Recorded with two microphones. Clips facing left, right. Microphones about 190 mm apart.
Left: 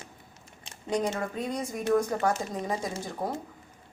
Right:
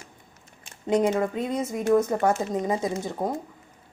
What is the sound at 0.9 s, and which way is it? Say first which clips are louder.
Speech: right 7 dB; 25° right (ahead or behind).